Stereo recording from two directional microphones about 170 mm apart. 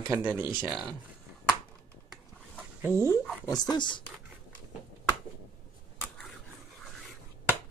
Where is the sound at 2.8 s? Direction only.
15° right (ahead or behind).